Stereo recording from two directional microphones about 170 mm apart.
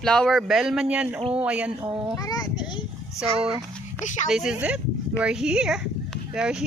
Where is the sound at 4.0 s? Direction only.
45° left (ahead or behind).